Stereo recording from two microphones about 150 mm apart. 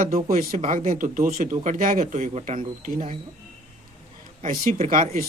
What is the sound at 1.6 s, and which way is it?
Speech, 60° right (ahead or behind).